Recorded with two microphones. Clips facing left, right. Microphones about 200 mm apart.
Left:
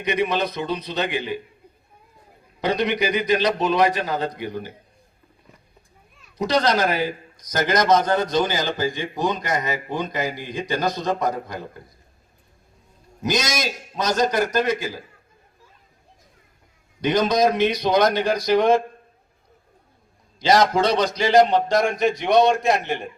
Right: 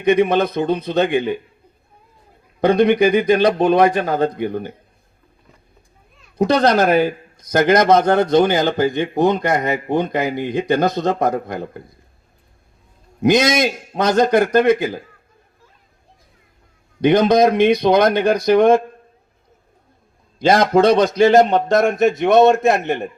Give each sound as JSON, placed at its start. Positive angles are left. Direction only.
{"t": 0.0, "sound": "a man's voice", "side_deg": -55}
{"t": 2.6, "sound": "a man's voice", "side_deg": -55}
{"t": 6.3, "sound": "speech", "side_deg": -55}
{"t": 13.2, "sound": "speech", "side_deg": -60}
{"t": 17.1, "sound": "speech", "side_deg": -55}
{"t": 20.4, "sound": "a man's voice", "side_deg": -50}